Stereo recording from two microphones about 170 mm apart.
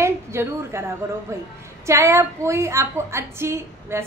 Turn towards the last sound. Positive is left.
turn(degrees=-15)  # may be behind; listen again after turning